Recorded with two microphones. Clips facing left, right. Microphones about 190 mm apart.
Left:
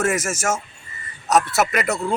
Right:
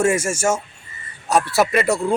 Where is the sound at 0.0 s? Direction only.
30° right (ahead or behind).